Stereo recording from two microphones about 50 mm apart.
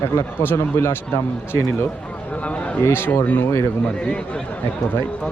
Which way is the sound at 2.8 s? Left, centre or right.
Left.